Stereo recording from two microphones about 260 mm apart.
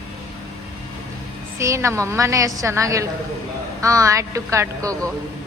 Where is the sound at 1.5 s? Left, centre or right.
Centre.